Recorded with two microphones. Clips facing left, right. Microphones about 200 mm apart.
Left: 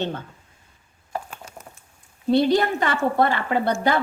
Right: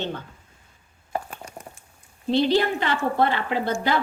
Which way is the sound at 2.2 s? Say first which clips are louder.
Left 2 dB; 45° left (ahead or behind).